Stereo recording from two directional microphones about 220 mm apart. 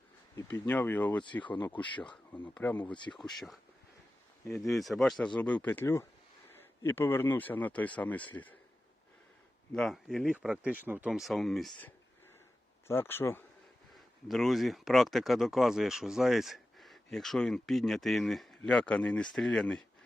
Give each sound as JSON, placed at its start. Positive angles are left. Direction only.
{"t": 0.3, "sound": "speech", "side_deg": 10}
{"t": 1.2, "sound": "speech", "side_deg": 20}
{"t": 1.7, "sound": "speech", "side_deg": 5}
{"t": 4.7, "sound": "speech", "side_deg": 0}
{"t": 9.7, "sound": "speech", "side_deg": 0}
{"t": 12.9, "sound": "speech", "side_deg": 10}